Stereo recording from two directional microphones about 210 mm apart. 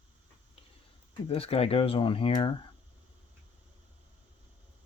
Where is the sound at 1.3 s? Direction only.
25° left (ahead or behind).